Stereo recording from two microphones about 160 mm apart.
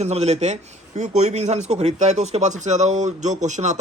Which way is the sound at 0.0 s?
45° right (ahead or behind).